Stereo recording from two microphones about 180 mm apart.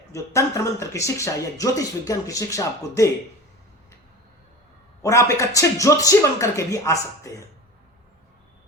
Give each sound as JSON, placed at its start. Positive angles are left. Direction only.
{"t": 0.1, "sound": "speech", "side_deg": 15}
{"t": 5.0, "sound": "speech", "side_deg": 20}